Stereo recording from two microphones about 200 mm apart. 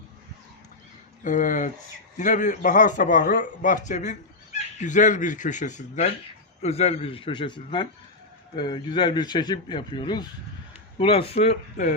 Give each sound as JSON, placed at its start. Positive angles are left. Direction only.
{"t": 1.2, "sound": "a man's voice", "side_deg": 40}